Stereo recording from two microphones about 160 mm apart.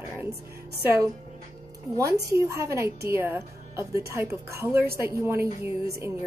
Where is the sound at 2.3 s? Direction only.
20° right (ahead or behind).